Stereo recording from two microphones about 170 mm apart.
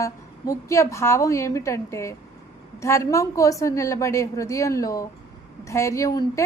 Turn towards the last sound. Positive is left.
turn(degrees=20)  # may be behind; listen again after turning